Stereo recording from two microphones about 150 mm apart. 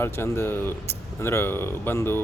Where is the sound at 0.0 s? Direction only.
15° left (ahead or behind).